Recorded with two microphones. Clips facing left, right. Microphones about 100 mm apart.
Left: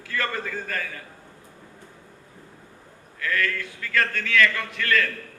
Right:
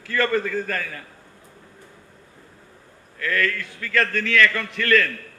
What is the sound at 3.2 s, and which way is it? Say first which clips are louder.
A man's voice: right 2 dB; 50° right (ahead or behind).